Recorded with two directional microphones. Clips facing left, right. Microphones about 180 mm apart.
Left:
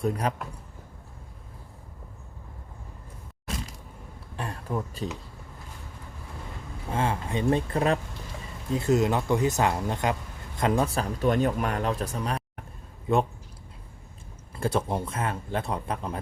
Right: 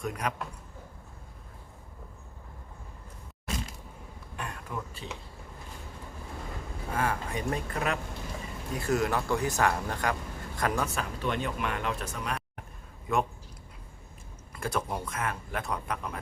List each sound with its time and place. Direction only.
0.0 s speech: 30° left (ahead or behind)
4.4 s a sound: 35° left (ahead or behind)
6.9 s speech: 25° left (ahead or behind)
14.5 s speech: 30° left (ahead or behind)